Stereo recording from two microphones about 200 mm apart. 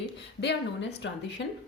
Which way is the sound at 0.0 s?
55° left (ahead or behind).